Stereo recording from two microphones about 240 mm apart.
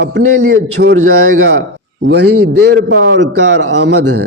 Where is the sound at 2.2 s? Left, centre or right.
Right.